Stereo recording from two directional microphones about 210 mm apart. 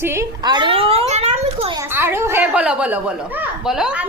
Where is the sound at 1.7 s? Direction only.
10° right (ahead or behind).